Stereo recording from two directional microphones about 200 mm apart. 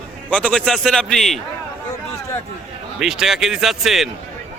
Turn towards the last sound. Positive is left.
turn(degrees=0)  # may be behind; listen again after turning